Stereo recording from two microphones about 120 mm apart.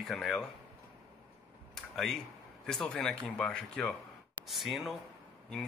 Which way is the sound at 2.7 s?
5° left (ahead or behind).